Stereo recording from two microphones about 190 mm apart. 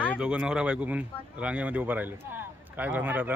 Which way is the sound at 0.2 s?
5° right (ahead or behind).